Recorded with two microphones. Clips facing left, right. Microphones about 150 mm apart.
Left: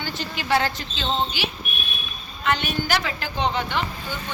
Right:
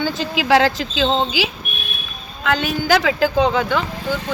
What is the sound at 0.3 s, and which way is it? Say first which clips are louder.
Speech: right 7 dB; 90° right.